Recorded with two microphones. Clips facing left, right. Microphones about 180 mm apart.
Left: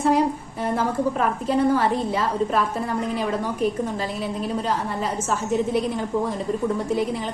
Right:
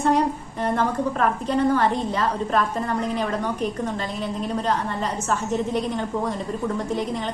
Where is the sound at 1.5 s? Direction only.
5° left (ahead or behind).